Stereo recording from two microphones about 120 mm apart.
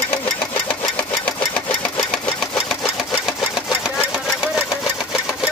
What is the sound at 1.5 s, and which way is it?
Sewing machine, 10° left (ahead or behind).